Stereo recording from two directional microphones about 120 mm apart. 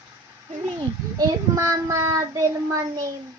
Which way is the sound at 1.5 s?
25° right (ahead or behind).